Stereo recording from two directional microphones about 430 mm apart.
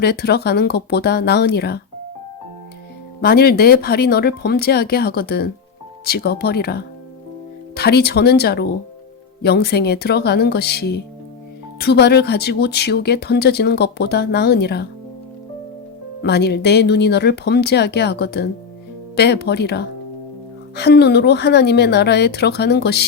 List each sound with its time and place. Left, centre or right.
0.0 s speech: left
3.2 s speech: left
16.2 s speech: left